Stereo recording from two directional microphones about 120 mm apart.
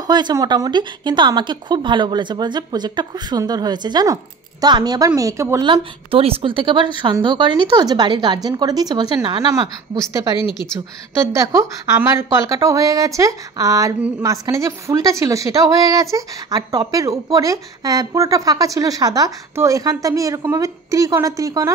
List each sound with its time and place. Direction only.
0.0 s speech: 35° right (ahead or behind)
5.6 s speech: 45° right (ahead or behind)
11.4 s a woman's voice: 25° right (ahead or behind)